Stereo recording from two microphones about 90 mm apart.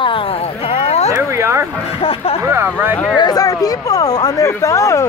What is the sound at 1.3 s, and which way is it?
Speech, 30° right (ahead or behind).